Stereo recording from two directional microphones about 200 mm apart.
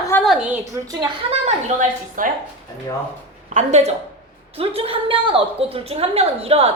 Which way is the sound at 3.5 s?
35° right (ahead or behind).